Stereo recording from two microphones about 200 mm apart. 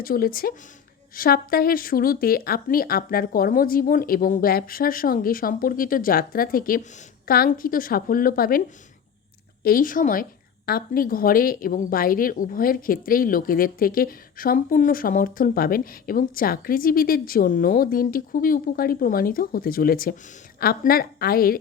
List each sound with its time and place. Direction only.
0.0 s a woman's voice: 45° left (ahead or behind)
9.6 s a woman's voice: 45° left (ahead or behind)